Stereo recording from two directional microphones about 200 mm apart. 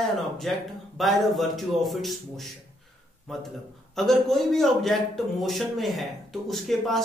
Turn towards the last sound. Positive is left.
turn(degrees=0)  # may be behind; listen again after turning